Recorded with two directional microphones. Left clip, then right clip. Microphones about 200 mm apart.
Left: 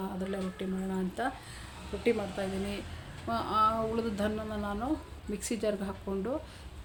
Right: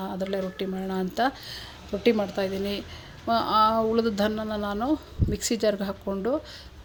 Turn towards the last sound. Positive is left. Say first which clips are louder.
# right 7 dB
turn(degrees=-40)  # may be behind; listen again after turning